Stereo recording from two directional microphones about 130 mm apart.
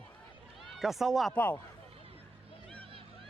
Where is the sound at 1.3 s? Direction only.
15° left (ahead or behind).